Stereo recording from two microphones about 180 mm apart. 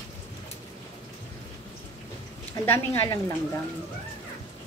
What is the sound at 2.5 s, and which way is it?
Speech, 15° left (ahead or behind).